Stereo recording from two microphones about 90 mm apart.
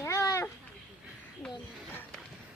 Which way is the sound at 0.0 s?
35° left (ahead or behind).